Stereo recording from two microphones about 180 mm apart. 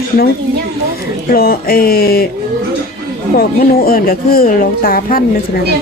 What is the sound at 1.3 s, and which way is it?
Speech, 55° left (ahead or behind).